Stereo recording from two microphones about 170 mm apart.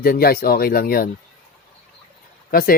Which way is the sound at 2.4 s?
60° left (ahead or behind).